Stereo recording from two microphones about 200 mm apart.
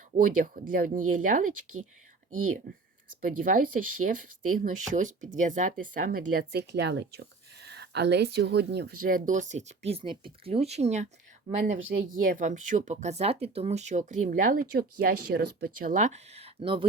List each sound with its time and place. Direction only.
0.3 s speech: 45° right (ahead or behind); by 16.8 s 25° right (ahead or behind)